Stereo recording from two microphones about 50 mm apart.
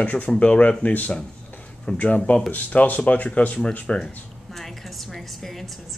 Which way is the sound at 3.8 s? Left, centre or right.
Centre.